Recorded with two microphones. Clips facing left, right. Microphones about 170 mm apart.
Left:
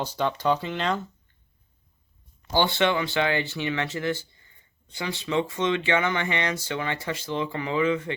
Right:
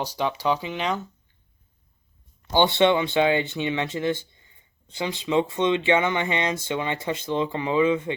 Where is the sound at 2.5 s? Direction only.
20° right (ahead or behind).